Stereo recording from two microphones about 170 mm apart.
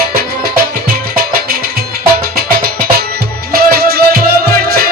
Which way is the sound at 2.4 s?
60° right (ahead or behind).